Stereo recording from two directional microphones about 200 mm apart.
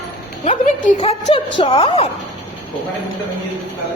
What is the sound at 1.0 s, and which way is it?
A woman's voice, 30° left (ahead or behind).